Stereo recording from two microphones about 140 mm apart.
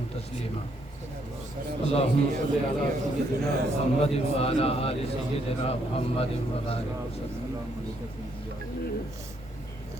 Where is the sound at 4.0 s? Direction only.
45° left (ahead or behind).